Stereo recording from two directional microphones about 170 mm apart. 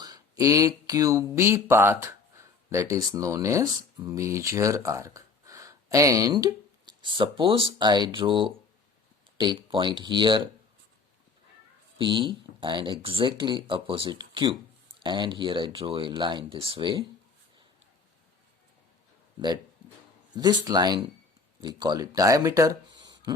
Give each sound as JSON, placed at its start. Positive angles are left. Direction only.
{"t": 0.0, "sound": "speech", "side_deg": -20}
{"t": 11.9, "sound": "speech", "side_deg": -30}
{"t": 20.3, "sound": "speech", "side_deg": -25}